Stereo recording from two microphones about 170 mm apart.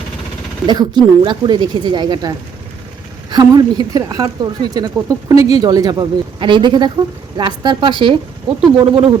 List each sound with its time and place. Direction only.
0.7 s speech: 25° right (ahead or behind)